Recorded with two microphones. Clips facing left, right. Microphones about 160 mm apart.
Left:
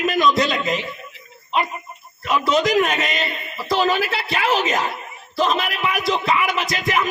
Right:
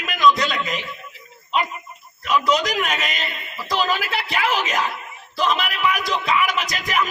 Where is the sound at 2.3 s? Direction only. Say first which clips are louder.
Left 2 dB; 25° left (ahead or behind).